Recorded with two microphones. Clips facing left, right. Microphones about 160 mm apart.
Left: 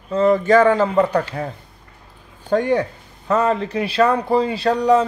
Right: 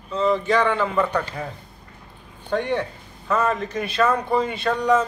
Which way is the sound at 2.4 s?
40° left (ahead or behind).